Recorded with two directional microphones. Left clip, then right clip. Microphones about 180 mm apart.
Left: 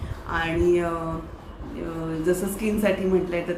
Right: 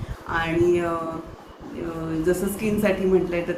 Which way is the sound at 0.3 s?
10° left (ahead or behind).